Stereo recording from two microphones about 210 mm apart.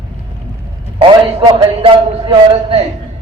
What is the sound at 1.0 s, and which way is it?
A man's voice, 25° right (ahead or behind).